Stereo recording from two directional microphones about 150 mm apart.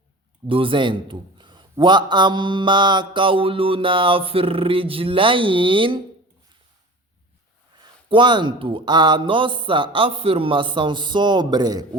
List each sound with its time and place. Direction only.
0.4 s a man's voice: 35° right (ahead or behind)
8.1 s a man's voice: 30° right (ahead or behind)